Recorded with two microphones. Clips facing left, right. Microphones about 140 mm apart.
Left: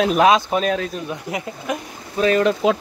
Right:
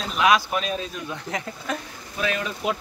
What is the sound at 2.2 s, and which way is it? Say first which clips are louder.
Speech: left 10 dB; 40° left (ahead or behind).